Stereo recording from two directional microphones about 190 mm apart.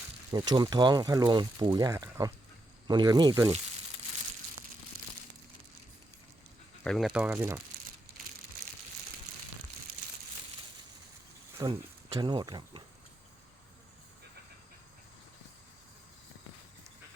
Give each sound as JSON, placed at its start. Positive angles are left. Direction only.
{"t": 0.3, "sound": "speech", "side_deg": -25}
{"t": 6.8, "sound": "speech", "side_deg": 0}
{"t": 11.5, "sound": "speech", "side_deg": -20}